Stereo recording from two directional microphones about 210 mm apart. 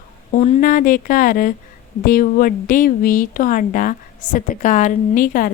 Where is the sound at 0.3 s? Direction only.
35° left (ahead or behind).